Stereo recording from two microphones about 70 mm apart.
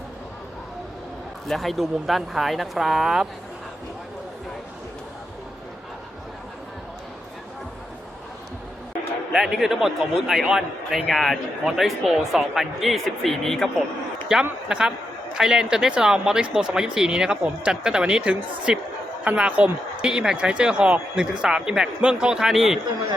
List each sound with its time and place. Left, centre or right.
1.5 s a man's voice: centre
9.3 s a man's voice: centre
14.3 s speech: centre